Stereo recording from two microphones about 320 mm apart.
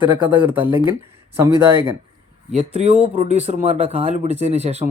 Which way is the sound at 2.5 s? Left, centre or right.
Centre.